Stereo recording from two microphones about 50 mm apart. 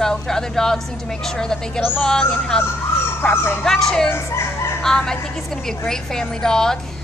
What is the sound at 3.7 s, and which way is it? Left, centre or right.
Speech, centre.